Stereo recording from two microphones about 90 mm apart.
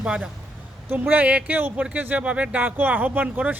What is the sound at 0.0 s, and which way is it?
A man's voice, 15° right (ahead or behind).